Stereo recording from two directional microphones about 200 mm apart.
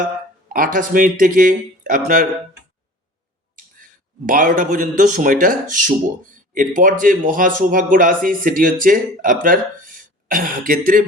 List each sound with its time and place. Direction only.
0.4 s speech: 45° right (ahead or behind)
4.3 s speech: 40° right (ahead or behind)